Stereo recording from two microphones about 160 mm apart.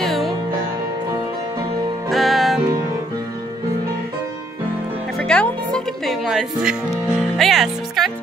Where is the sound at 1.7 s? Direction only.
25° right (ahead or behind).